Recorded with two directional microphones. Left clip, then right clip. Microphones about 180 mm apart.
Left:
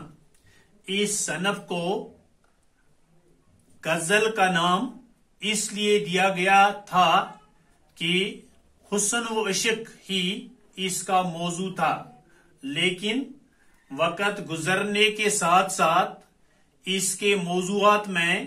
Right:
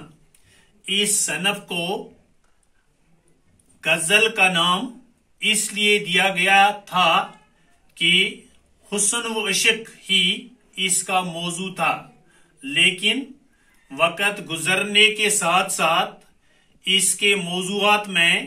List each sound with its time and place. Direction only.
0.8 s speech: 50° left (ahead or behind)
3.8 s a man's voice: 50° left (ahead or behind)
13.8 s speech: 45° left (ahead or behind)